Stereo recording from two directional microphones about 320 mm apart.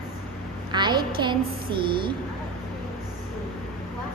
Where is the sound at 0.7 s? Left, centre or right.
Centre.